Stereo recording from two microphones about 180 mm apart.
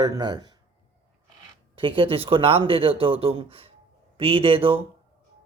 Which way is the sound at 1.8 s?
30° right (ahead or behind).